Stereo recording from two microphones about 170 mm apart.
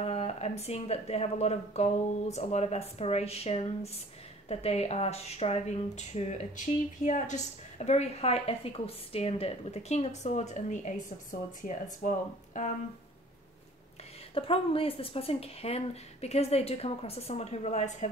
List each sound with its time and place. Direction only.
0.0 s speech: 40° left (ahead or behind)
12.0 s speech: 50° left (ahead or behind)
14.3 s speech: 35° left (ahead or behind)